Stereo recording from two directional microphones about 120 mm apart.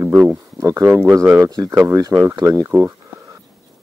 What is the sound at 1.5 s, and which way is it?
Speech, 35° right (ahead or behind).